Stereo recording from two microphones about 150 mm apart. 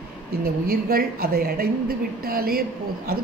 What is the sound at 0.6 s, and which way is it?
A woman's voice, 85° right.